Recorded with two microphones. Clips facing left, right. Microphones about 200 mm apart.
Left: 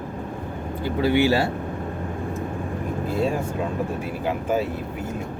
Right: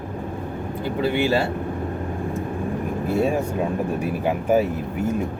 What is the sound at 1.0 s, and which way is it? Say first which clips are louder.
Speech: left 3 dB; 15° left (ahead or behind).